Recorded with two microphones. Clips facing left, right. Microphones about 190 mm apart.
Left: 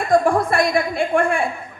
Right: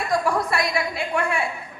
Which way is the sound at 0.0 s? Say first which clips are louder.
Left 6 dB; 50° left (ahead or behind).